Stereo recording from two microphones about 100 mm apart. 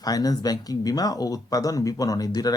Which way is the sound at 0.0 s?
40° left (ahead or behind).